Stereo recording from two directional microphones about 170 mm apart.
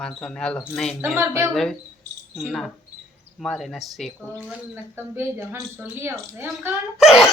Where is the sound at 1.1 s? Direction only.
15° right (ahead or behind).